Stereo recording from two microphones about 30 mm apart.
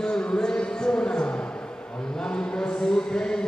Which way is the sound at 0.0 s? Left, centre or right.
Left.